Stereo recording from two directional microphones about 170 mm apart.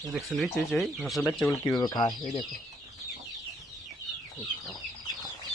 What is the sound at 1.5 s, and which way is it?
Speech, 20° left (ahead or behind).